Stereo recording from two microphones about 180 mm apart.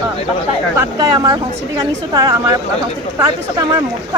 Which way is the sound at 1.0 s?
20° right (ahead or behind).